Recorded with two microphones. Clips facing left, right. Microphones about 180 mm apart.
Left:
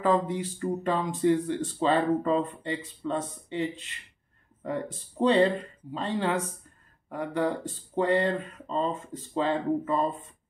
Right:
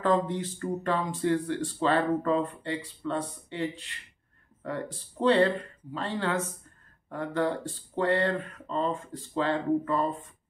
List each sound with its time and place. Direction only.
0.0 s speech: 10° left (ahead or behind)